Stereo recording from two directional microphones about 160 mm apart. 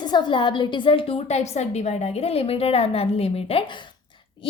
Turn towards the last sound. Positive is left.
turn(degrees=35)  # may be behind; listen again after turning